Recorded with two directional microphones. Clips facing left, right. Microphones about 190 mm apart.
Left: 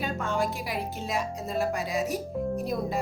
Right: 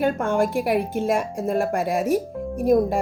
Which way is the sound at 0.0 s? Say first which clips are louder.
Right 8 dB; 55° right (ahead or behind).